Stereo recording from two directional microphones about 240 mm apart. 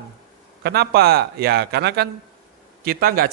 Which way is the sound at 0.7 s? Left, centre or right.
Right.